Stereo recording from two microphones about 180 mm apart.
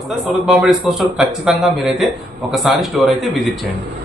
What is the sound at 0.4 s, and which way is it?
Speech, 5° right (ahead or behind).